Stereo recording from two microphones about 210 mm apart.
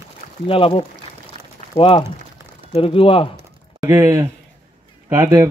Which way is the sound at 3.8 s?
10° right (ahead or behind).